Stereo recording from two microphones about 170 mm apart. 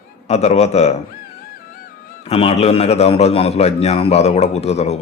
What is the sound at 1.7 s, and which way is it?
Music, 55° left (ahead or behind).